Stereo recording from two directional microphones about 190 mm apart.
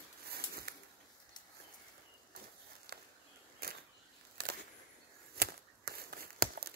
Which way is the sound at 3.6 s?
55° right (ahead or behind).